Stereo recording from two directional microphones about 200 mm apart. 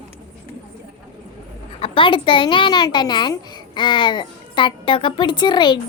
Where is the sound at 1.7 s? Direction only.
25° left (ahead or behind).